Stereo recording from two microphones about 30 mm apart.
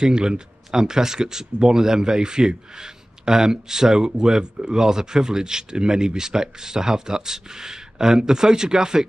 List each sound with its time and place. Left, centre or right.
0.0 s speech: right